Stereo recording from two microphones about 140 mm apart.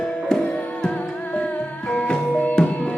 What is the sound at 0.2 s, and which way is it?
Music, 5° left (ahead or behind).